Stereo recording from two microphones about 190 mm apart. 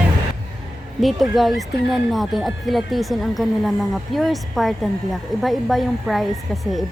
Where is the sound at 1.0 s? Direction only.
Centre (ahead or behind).